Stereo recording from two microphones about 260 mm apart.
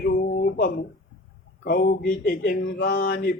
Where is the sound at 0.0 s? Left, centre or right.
Left.